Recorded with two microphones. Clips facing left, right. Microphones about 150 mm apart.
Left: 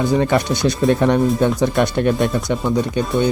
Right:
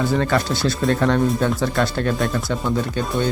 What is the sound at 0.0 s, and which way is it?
Speech, 20° left (ahead or behind).